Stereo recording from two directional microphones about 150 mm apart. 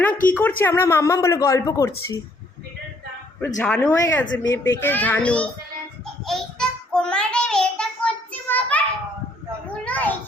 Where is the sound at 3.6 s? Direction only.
10° left (ahead or behind).